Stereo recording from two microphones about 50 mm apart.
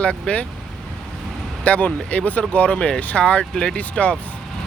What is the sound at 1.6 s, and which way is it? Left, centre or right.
Speech, left.